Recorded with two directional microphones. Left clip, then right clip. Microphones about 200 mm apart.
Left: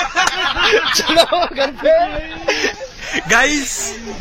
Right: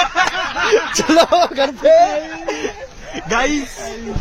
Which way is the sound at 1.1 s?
40° right (ahead or behind).